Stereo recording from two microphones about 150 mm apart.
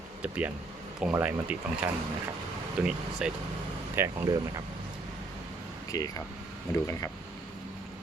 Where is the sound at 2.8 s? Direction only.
5° right (ahead or behind).